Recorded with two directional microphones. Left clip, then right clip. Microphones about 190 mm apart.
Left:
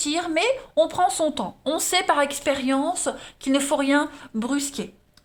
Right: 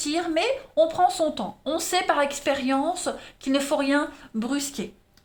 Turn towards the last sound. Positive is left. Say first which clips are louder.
# left 2 dB
turn(degrees=25)  # may be behind; listen again after turning